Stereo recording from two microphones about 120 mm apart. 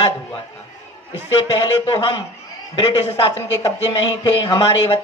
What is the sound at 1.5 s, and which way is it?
Speech, 50° left (ahead or behind).